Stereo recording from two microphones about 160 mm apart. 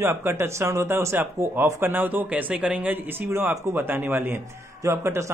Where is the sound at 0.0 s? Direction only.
15° right (ahead or behind).